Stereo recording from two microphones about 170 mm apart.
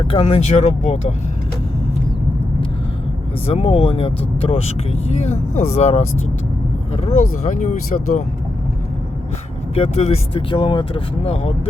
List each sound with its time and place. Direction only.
0.1 s speech: 35° left (ahead or behind)
3.4 s speech: 35° left (ahead or behind)
9.7 s speech: 35° left (ahead or behind)